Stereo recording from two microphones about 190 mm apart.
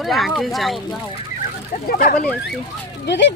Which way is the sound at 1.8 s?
50° left (ahead or behind).